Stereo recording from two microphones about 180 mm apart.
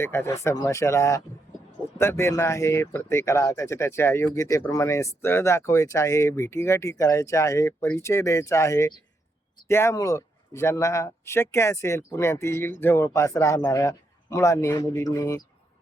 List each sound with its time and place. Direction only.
0.0 s speech: 15° left (ahead or behind)